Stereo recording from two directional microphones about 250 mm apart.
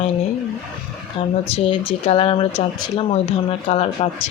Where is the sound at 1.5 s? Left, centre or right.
Left.